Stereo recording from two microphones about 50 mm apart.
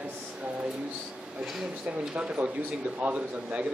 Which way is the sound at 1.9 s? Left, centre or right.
Right.